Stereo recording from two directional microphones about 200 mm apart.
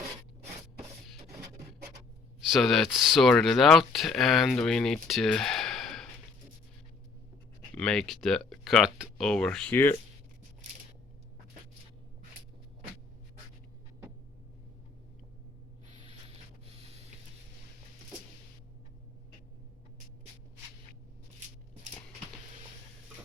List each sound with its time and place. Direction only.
2.4 s speech: centre (ahead or behind)
7.8 s speech: 5° left (ahead or behind)